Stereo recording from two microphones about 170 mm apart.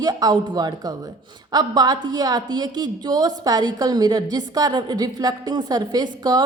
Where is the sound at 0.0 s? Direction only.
20° right (ahead or behind).